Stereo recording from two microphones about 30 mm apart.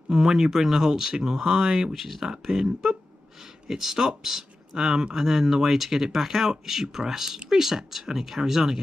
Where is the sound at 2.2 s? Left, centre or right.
Right.